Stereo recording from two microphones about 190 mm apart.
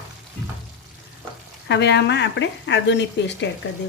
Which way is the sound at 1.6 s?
65° left (ahead or behind).